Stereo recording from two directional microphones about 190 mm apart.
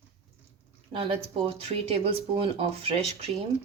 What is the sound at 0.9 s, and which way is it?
Speech, 30° right (ahead or behind).